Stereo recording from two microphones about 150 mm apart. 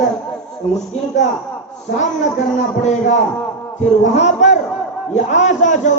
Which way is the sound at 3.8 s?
50° left (ahead or behind).